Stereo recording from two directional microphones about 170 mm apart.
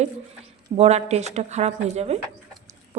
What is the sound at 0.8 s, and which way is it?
A woman's voice, 40° right (ahead or behind).